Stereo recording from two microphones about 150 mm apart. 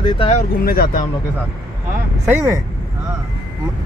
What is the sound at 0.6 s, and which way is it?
Speech, 75° left (ahead or behind).